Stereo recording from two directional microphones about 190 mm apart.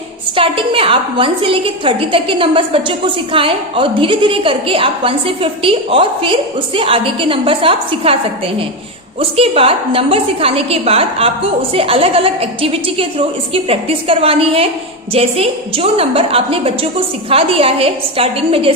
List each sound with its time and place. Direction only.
0.3 s a woman's voice: 25° right (ahead or behind)